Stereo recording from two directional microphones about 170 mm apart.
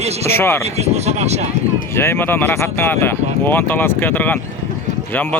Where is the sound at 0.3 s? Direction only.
15° left (ahead or behind).